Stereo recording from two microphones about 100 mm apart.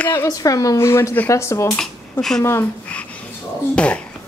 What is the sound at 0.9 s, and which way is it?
Speech, 25° left (ahead or behind).